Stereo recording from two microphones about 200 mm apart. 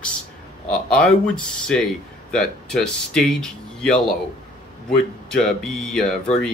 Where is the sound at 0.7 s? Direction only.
5° left (ahead or behind).